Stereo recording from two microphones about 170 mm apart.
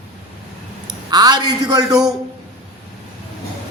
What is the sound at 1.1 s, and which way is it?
Speech, 25° right (ahead or behind).